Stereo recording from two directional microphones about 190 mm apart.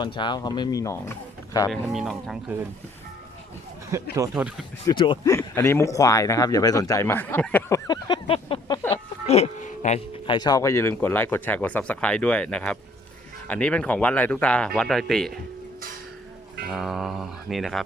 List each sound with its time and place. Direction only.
0.0 s speech: 25° left (ahead or behind)
1.7 s speech: centre (ahead or behind)
4.1 s speech: 10° right (ahead or behind)
4.9 s speech: 20° left (ahead or behind)
7.9 s a sound: 25° left (ahead or behind)
9.2 s music: 35° left (ahead or behind)
10.2 s speech: 20° left (ahead or behind); by 15.4 s centre (ahead or behind)
16.6 s speech: centre (ahead or behind)